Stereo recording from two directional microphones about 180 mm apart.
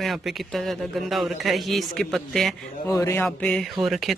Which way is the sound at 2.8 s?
15° left (ahead or behind).